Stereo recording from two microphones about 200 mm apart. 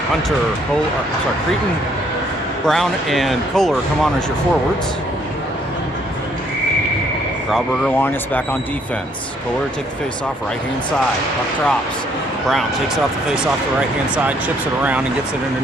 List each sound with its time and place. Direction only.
2.6 s speech: centre (ahead or behind)
7.5 s speech: 10° left (ahead or behind)
14.3 s speech: 5° right (ahead or behind)